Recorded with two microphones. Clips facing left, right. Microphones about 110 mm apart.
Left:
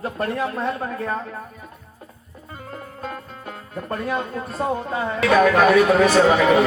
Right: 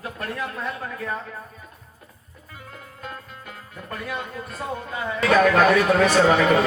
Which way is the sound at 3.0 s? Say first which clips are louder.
Left 4 dB; 35° left (ahead or behind).